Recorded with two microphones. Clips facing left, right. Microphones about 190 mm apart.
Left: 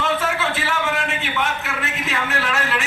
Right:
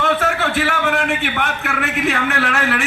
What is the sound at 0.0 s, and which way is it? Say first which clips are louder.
A man's voice: right 4 dB; 55° right (ahead or behind).